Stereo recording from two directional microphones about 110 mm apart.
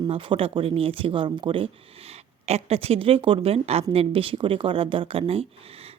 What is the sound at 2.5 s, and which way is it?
Speech, 75° right (ahead or behind).